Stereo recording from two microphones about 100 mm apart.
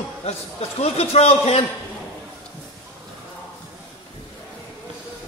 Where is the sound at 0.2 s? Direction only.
90° left.